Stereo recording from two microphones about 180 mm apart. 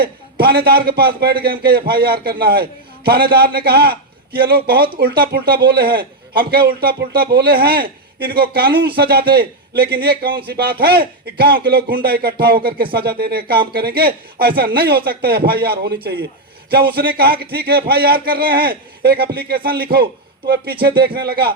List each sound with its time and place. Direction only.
0.3 s speech: 60° right (ahead or behind)